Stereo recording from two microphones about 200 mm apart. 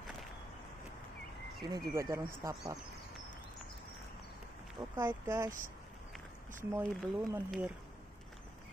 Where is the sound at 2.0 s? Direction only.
10° right (ahead or behind).